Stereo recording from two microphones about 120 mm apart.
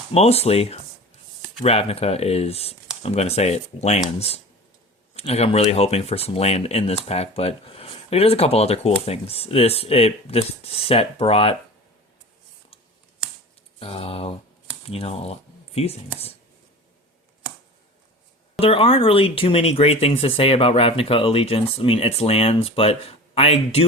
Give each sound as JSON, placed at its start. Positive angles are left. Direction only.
{"t": 0.1, "sound": "speech", "side_deg": 60}
{"t": 5.1, "sound": "speech", "side_deg": 60}
{"t": 13.7, "sound": "speech", "side_deg": 55}
{"t": 18.6, "sound": "speech", "side_deg": 50}